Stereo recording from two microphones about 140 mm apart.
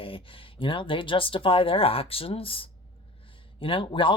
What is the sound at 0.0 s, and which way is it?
Speech, 40° left (ahead or behind).